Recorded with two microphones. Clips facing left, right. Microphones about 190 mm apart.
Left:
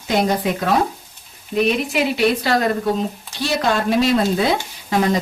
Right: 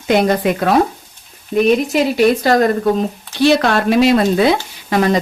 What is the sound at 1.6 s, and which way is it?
A woman's voice, 45° right (ahead or behind).